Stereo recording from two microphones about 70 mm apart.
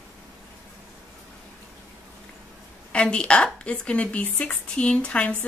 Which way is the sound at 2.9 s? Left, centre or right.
Centre.